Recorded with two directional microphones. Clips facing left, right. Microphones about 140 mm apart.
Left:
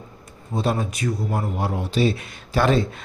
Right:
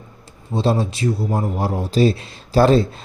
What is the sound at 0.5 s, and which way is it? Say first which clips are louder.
Speech: right 4 dB; 30° right (ahead or behind).